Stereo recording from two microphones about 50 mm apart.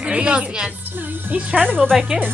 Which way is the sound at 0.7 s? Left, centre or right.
Right.